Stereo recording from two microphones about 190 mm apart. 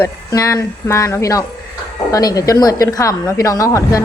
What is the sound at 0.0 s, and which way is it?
A woman's voice, 15° left (ahead or behind).